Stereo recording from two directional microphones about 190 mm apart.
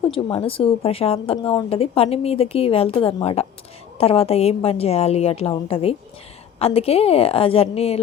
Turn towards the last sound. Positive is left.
turn(degrees=30)  # may be behind; listen again after turning